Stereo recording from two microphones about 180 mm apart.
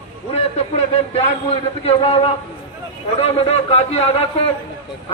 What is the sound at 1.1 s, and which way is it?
A man's voice, 35° left (ahead or behind).